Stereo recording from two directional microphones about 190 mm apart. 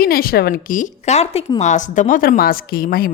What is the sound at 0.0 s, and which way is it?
A woman's voice, 50° left (ahead or behind).